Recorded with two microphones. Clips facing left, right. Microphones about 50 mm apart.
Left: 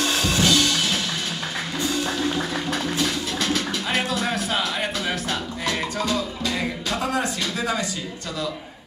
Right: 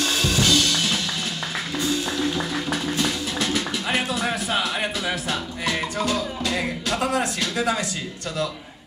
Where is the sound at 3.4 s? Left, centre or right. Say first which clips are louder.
Even; centre.